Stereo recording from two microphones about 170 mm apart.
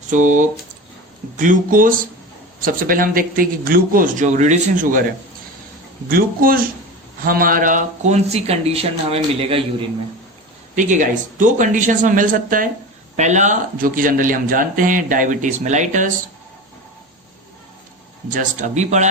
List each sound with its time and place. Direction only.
0.1 s a man's voice: 50° right (ahead or behind)
6.1 s a man's voice: 60° right (ahead or behind); by 9.6 s 35° right (ahead or behind)
10.8 s speech: 50° right (ahead or behind)
18.3 s speech: 50° right (ahead or behind)